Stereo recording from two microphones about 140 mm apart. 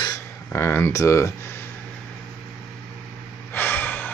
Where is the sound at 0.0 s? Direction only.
20° left (ahead or behind).